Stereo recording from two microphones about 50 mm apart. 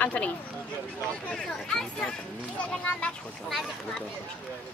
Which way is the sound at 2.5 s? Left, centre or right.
Left.